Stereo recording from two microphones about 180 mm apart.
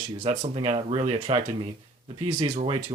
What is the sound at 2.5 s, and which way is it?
Speech, 40° right (ahead or behind).